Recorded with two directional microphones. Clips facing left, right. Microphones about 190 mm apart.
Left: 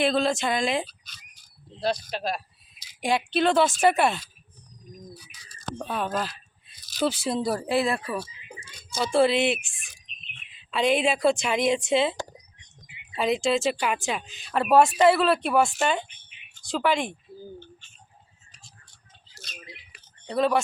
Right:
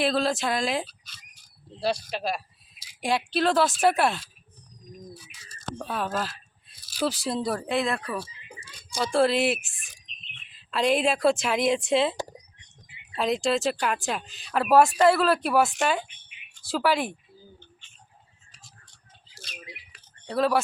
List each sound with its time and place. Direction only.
0.0 s speech: centre (ahead or behind)
19.4 s a sound: 30° right (ahead or behind)
20.2 s speech: centre (ahead or behind)